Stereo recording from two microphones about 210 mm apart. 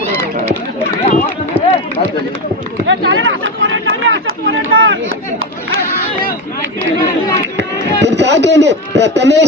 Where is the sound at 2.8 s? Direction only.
60° right (ahead or behind).